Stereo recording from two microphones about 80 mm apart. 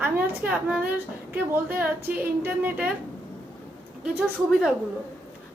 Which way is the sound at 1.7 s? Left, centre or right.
Right.